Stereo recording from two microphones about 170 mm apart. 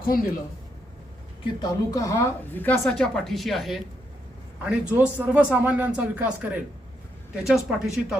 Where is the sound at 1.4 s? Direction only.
25° left (ahead or behind); by 6.3 s 10° right (ahead or behind).